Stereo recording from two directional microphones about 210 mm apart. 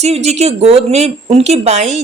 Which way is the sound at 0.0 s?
30° right (ahead or behind).